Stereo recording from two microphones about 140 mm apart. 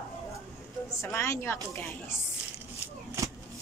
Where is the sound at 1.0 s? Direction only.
20° left (ahead or behind).